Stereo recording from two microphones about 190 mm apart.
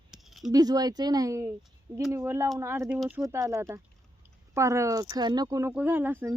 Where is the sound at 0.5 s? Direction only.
20° right (ahead or behind).